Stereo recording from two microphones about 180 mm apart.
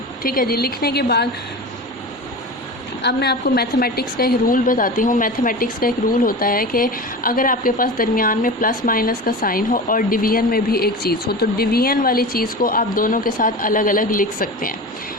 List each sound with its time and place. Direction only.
0.2 s a woman's voice: 55° left (ahead or behind)
3.0 s a woman's voice: 70° left (ahead or behind); by 14.8 s 50° left (ahead or behind)